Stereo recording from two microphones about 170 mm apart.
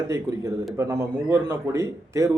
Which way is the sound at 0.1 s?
20° right (ahead or behind).